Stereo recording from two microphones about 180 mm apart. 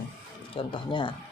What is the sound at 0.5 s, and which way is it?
Speech, 30° left (ahead or behind).